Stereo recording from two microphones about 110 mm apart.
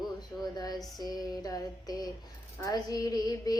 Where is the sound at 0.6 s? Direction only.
35° left (ahead or behind).